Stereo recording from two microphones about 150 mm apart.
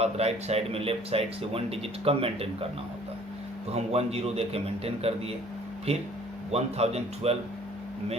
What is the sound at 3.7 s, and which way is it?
A man's voice, 45° right (ahead or behind).